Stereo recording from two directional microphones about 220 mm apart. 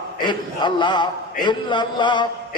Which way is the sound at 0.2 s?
20° left (ahead or behind).